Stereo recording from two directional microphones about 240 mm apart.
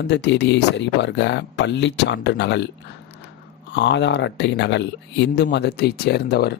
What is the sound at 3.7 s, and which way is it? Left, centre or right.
Speech, left.